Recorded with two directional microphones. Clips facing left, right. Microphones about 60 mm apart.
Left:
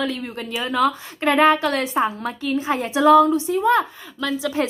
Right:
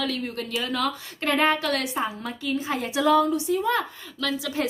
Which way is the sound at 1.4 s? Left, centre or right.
Left.